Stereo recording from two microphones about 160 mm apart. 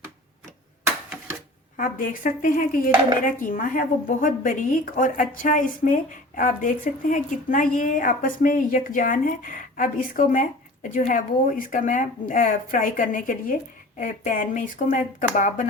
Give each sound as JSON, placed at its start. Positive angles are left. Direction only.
{"t": 1.7, "sound": "dishes", "side_deg": 55}
{"t": 14.0, "sound": "speech", "side_deg": 55}